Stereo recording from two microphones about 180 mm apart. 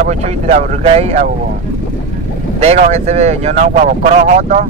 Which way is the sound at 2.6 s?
35° right (ahead or behind).